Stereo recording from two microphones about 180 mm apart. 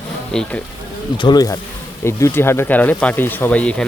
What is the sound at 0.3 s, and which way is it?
Speech, 5° left (ahead or behind).